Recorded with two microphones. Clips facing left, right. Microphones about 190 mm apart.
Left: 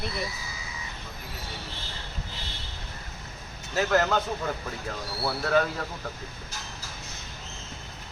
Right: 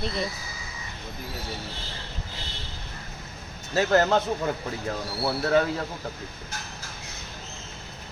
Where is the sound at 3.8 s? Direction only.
30° right (ahead or behind).